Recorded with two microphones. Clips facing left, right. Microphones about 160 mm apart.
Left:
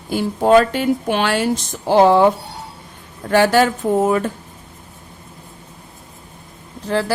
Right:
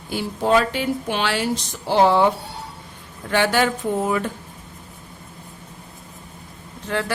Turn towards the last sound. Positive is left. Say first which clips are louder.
# left 5 dB
turn(degrees=35)  # may be behind; listen again after turning